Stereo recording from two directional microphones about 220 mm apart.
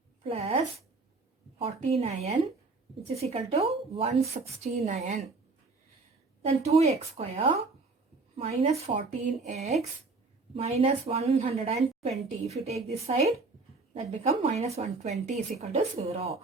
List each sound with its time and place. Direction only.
0.3 s speech: 30° right (ahead or behind)
6.4 s speech: 30° right (ahead or behind)